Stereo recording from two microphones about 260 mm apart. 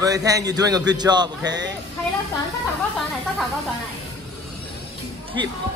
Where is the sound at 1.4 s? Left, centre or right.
Right.